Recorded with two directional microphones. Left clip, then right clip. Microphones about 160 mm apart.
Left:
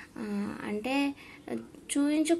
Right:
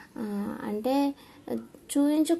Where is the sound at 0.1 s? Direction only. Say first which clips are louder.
Right 3 dB; 25° right (ahead or behind).